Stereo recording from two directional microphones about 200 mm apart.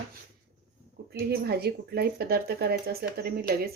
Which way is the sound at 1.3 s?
55° right (ahead or behind).